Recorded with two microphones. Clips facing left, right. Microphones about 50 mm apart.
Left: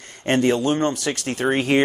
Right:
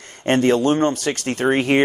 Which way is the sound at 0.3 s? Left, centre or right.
Right.